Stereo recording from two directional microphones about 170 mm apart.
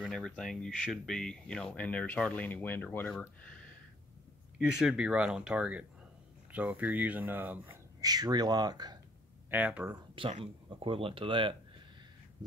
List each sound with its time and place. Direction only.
0.0 s speech: centre (ahead or behind)
7.7 s speech: 20° right (ahead or behind)
9.5 s speech: 10° right (ahead or behind)
9.8 s speech: 30° right (ahead or behind)